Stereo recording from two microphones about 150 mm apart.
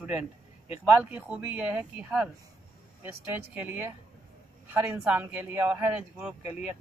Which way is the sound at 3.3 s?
10° right (ahead or behind).